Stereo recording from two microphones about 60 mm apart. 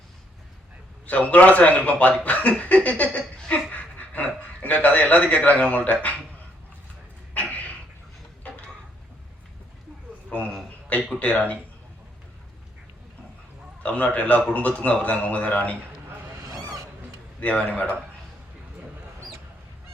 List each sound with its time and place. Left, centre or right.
1.0 s speech: left
7.4 s a sound: left
10.2 s a sound: left
11.2 s speech: left
13.8 s speech: left
17.4 s speech: left